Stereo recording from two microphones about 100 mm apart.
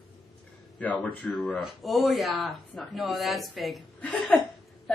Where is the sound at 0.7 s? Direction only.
15° left (ahead or behind).